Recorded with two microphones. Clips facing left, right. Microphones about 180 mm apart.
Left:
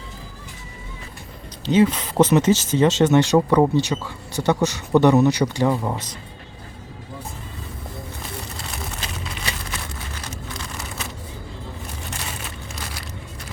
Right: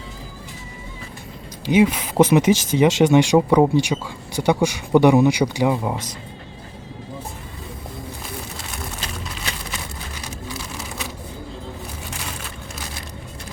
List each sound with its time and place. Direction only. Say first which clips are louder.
1.6 s speech: right 1 dB; 10° right (ahead or behind)
8.6 s a sound: even; centre (ahead or behind)
12.1 s crushing: even; centre (ahead or behind)